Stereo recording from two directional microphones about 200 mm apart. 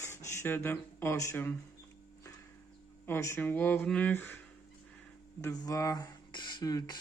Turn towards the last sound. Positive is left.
turn(degrees=20)  # may be behind; listen again after turning